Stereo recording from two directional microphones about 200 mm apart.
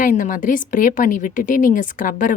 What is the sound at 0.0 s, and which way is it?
A woman's voice, 40° left (ahead or behind).